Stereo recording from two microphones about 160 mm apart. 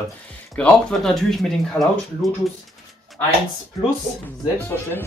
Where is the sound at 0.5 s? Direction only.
5° left (ahead or behind).